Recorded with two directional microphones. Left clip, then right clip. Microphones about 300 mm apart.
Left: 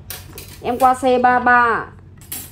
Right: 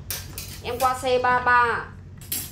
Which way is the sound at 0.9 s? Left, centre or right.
Centre.